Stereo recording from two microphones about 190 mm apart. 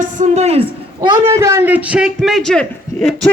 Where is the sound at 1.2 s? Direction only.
15° right (ahead or behind); by 3.3 s 5° left (ahead or behind).